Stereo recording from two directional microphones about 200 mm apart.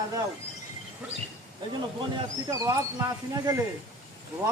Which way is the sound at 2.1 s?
15° right (ahead or behind).